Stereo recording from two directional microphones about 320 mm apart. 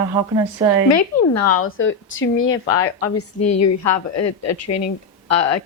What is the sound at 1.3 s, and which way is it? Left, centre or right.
Speech, left.